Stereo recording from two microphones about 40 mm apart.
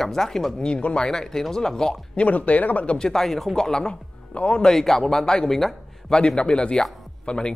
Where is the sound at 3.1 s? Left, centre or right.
Centre.